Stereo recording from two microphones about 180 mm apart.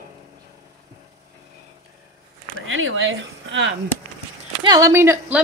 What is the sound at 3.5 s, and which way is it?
Chop, 80° right.